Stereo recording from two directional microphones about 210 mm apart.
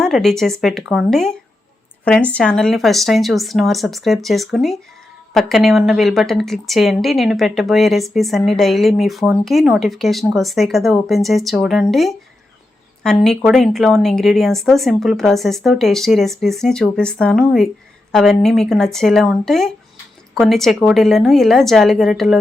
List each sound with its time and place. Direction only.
0.0 s a woman's voice: centre (ahead or behind)